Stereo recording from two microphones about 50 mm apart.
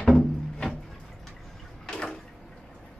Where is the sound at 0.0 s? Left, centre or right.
Centre.